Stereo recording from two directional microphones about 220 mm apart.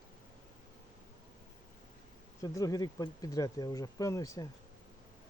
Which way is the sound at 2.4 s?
15° left (ahead or behind).